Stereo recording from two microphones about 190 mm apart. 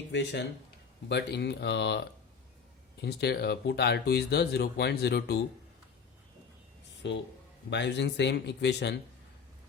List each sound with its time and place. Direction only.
0.1 s speech: 65° left (ahead or behind)
7.0 s speech: 65° left (ahead or behind)